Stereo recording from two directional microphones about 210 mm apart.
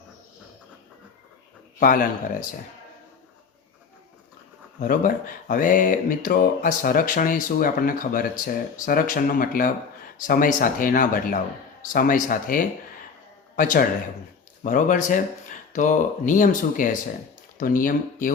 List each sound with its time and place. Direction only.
1.8 s speech: 40° left (ahead or behind)
4.8 s speech: 40° left (ahead or behind)